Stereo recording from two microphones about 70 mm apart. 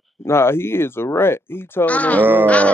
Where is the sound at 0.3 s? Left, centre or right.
Left.